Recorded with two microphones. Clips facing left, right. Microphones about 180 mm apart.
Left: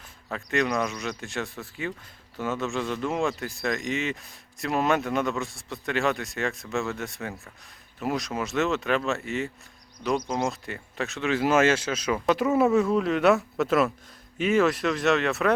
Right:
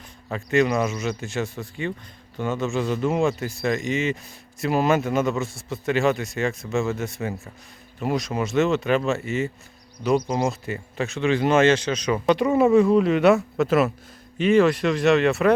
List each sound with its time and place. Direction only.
0.3 s speech: centre (ahead or behind)